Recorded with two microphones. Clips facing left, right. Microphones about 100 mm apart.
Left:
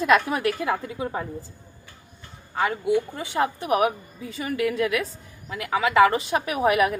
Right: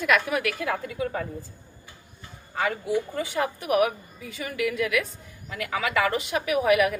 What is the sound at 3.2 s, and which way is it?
A woman's voice, 25° left (ahead or behind).